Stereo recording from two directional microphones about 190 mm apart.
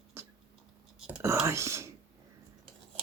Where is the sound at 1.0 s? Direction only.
10° right (ahead or behind).